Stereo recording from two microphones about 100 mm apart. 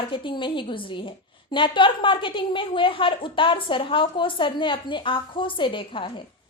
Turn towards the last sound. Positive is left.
turn(degrees=55)  # may be behind; listen again after turning